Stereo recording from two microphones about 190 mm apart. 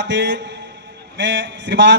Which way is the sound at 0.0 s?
65° right (ahead or behind).